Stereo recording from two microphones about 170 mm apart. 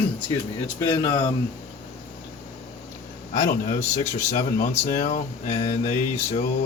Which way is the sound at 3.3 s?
50° left (ahead or behind).